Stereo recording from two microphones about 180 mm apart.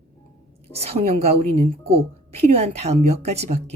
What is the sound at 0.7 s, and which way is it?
Speech, 35° right (ahead or behind).